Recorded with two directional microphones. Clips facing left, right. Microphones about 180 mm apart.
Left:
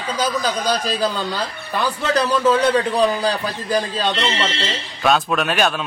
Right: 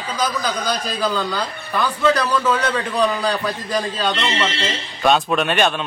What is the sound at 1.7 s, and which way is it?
A man's voice, 30° left (ahead or behind).